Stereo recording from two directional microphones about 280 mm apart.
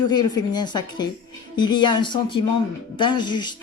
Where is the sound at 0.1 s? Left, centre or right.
Centre.